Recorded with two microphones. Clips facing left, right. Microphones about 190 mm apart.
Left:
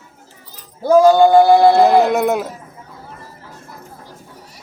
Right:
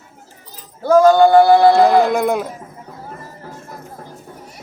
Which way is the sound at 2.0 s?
5° left (ahead or behind).